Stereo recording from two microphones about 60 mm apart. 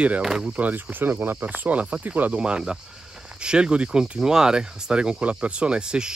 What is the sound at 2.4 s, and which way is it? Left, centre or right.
Speech, centre.